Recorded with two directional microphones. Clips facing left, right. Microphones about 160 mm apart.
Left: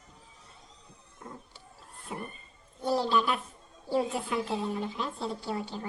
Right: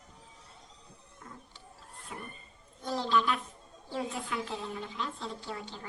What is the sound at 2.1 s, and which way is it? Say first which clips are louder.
Speech: left 6 dB; 30° left (ahead or behind).